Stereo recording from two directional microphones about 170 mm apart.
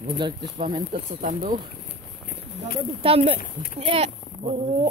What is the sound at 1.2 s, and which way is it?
Speech, 50° right (ahead or behind).